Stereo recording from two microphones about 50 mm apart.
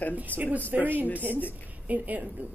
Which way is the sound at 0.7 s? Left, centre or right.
Right.